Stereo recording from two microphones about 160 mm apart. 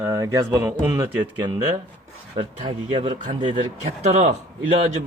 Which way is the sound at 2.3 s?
35° right (ahead or behind).